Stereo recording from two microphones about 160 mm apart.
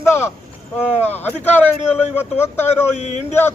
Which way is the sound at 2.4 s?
15° left (ahead or behind).